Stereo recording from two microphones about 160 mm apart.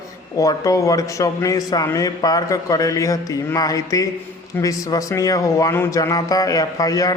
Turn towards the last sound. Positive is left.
turn(degrees=20)  # may be behind; listen again after turning